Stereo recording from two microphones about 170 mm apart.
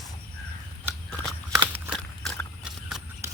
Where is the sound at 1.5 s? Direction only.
5° right (ahead or behind).